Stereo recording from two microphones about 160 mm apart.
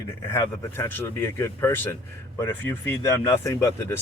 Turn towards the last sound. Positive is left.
turn(degrees=15)  # may be behind; listen again after turning